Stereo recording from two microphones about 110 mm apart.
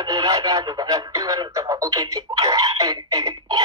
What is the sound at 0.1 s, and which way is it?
Speech, 30° right (ahead or behind).